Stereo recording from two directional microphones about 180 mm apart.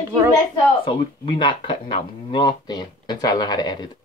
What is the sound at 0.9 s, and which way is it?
Speech, 25° left (ahead or behind).